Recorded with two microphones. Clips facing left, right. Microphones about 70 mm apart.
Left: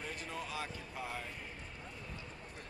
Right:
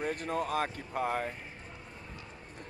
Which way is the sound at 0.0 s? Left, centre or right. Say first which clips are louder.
Right 10 dB; right.